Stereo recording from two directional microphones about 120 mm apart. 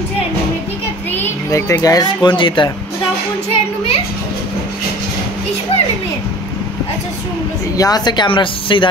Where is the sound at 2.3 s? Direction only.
45° left (ahead or behind).